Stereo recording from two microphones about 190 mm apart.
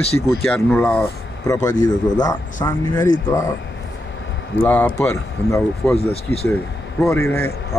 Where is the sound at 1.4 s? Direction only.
20° left (ahead or behind).